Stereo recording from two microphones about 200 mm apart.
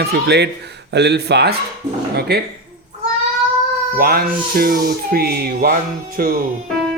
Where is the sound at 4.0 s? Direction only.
45° right (ahead or behind).